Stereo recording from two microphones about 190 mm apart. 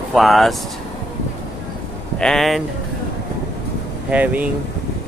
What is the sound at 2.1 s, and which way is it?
Speech, centre (ahead or behind).